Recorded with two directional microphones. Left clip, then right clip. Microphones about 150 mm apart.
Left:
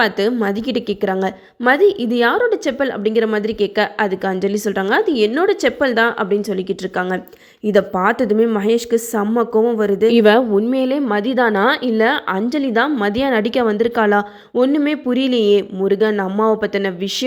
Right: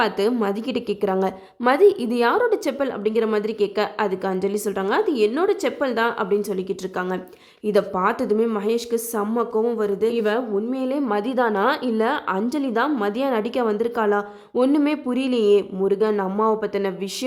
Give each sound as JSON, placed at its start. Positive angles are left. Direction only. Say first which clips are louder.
{"t": 0.0, "sound": "a woman's voice", "louder": "left 4 dB", "side_deg": 10}
{"t": 11.0, "sound": "a woman's voice", "louder": "left 5 dB", "side_deg": 10}
{"t": 14.5, "sound": "a woman's voice", "louder": "left 4 dB", "side_deg": 10}